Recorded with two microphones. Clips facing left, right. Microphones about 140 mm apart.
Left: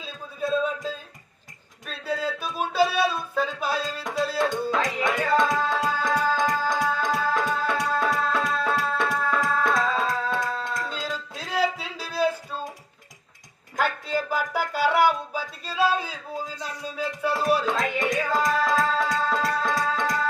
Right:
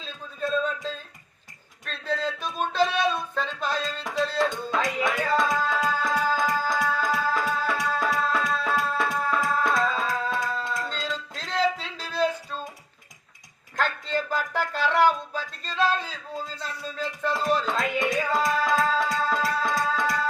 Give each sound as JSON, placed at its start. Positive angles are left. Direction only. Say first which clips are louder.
{"t": 0.0, "sound": "a sound", "louder": "left 1 dB", "side_deg": 10}
{"t": 1.8, "sound": "music", "louder": "even", "side_deg": 10}
{"t": 13.7, "sound": "music", "louder": "left 1 dB", "side_deg": 10}